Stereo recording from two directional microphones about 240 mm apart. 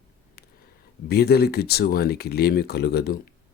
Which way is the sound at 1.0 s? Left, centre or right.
Left.